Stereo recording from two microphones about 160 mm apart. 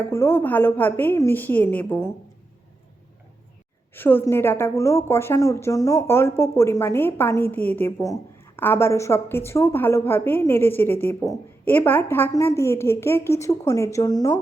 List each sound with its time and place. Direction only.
0.0 s a woman's voice: 15° left (ahead or behind)
3.9 s a woman's voice: 15° left (ahead or behind)